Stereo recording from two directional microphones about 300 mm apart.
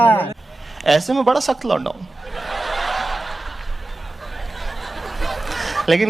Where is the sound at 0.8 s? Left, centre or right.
Centre.